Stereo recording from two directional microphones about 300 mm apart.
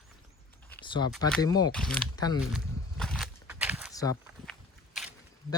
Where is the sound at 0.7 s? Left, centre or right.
Centre.